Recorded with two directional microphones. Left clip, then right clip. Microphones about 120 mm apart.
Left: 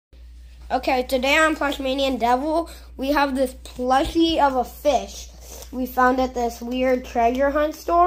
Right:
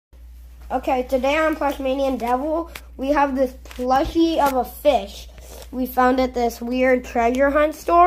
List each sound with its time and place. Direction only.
0.7 s a woman's voice: 20° left (ahead or behind)
3.0 s a woman's voice: 10° left (ahead or behind)
4.6 s speech: 10° right (ahead or behind); by 8.0 s 30° right (ahead or behind)